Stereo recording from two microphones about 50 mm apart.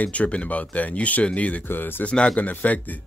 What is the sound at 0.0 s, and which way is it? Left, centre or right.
Speech, left.